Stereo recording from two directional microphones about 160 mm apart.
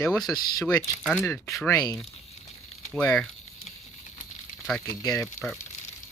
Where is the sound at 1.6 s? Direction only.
25° left (ahead or behind).